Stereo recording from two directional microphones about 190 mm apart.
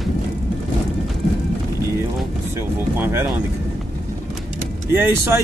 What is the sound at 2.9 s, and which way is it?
Speech, 10° right (ahead or behind).